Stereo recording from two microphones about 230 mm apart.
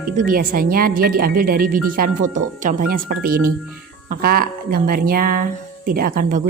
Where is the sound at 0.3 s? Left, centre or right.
Right.